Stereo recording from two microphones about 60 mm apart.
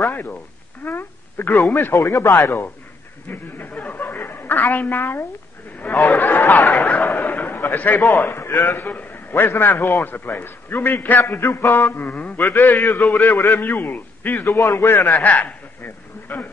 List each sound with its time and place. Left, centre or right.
0.1 s a man's voice: left
3.3 s a woman's voice: left
6.7 s a sound: left
8.2 s a man's voice: left
12.1 s a man's voice: left
12.4 s a man's voice: left
15.2 s a man's voice: left
15.8 s a sound: left